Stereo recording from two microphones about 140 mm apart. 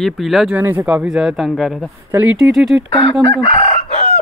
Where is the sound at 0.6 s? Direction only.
15° right (ahead or behind).